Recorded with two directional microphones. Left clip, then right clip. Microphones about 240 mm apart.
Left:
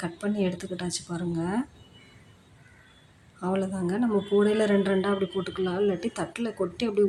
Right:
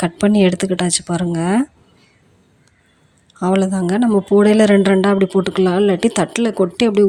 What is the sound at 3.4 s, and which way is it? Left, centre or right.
Speech, right.